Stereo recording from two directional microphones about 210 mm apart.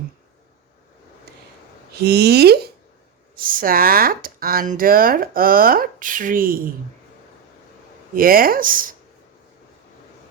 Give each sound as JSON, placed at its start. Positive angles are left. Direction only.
{"t": 1.3, "sound": "a sound", "side_deg": -50}
{"t": 1.9, "sound": "speech", "side_deg": -50}
{"t": 8.1, "sound": "speech", "side_deg": -45}